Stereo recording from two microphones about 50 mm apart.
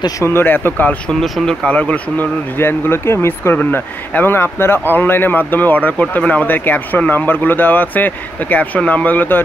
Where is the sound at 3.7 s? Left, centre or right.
Left.